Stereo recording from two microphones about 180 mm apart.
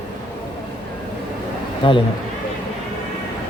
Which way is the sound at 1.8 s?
30° left (ahead or behind).